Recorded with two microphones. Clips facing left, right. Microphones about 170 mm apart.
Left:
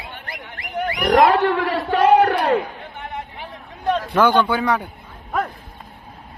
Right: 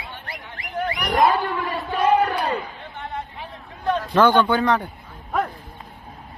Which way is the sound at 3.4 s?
25° left (ahead or behind).